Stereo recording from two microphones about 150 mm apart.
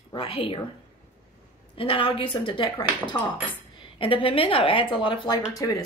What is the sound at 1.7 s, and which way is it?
Speech, 35° left (ahead or behind).